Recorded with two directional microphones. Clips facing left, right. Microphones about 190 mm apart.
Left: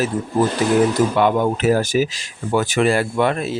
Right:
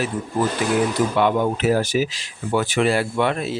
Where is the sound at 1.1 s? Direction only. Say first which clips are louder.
Left 2 dB; 45° left (ahead or behind).